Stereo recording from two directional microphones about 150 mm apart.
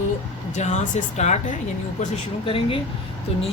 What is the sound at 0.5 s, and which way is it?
Speech, 50° left (ahead or behind).